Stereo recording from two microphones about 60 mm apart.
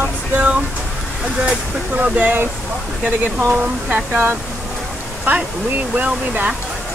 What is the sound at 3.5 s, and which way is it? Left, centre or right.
Speech, right.